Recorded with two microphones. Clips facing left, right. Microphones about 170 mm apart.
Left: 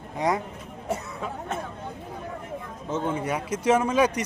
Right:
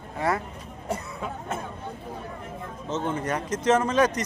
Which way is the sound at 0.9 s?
Centre (ahead or behind).